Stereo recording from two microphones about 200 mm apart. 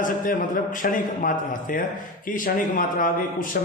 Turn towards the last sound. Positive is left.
turn(degrees=45)  # may be behind; listen again after turning